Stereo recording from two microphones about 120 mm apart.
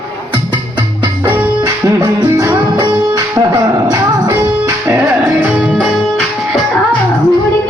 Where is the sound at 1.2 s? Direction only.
15° right (ahead or behind).